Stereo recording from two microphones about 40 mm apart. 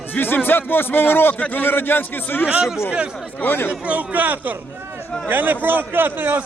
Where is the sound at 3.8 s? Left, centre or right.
Right.